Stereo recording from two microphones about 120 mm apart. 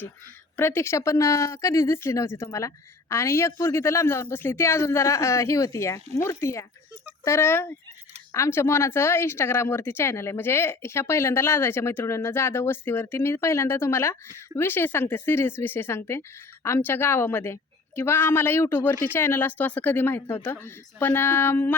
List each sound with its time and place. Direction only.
0.5 s speech: 20° left (ahead or behind)